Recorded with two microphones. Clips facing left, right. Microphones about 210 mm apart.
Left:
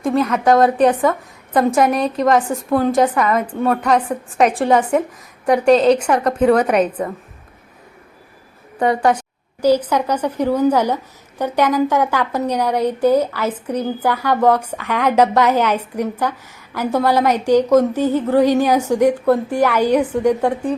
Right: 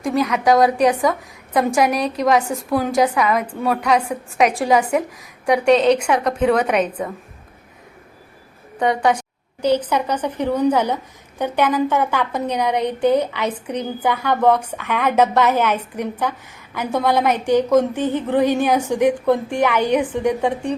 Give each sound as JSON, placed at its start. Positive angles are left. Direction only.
{"t": 0.0, "sound": "a woman's voice", "side_deg": 0}
{"t": 6.7, "sound": "a woman's voice", "side_deg": -5}
{"t": 8.8, "sound": "a woman's voice", "side_deg": 5}